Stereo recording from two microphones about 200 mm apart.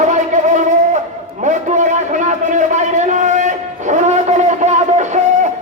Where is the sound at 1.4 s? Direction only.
35° right (ahead or behind).